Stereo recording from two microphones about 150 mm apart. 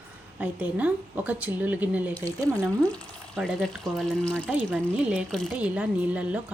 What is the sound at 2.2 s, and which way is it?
Speech, 20° right (ahead or behind).